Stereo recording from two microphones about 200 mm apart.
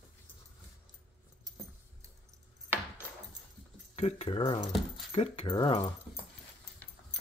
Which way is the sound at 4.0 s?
30° left (ahead or behind).